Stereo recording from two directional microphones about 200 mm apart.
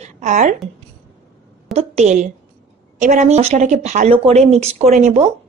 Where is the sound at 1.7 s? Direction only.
35° right (ahead or behind).